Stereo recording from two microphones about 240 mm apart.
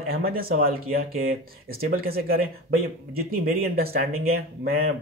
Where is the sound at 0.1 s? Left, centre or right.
Right.